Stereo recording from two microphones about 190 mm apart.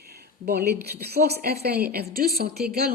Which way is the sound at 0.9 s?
55° right (ahead or behind).